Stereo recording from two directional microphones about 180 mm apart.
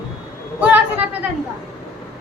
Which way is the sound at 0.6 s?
10° right (ahead or behind).